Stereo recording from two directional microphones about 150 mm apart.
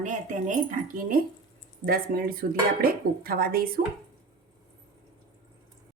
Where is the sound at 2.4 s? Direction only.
80° right.